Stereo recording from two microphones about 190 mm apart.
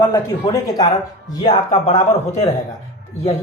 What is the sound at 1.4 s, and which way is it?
Speech, 35° left (ahead or behind).